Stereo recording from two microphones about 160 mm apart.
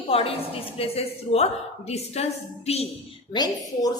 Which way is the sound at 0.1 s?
35° left (ahead or behind).